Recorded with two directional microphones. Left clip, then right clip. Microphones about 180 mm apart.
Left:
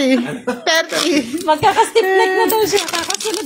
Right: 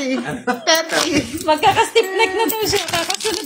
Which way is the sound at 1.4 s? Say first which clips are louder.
Left 1 dB; 5° left (ahead or behind).